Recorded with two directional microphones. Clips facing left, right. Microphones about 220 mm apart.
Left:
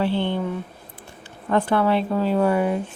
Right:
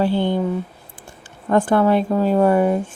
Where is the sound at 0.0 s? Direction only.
40° right (ahead or behind).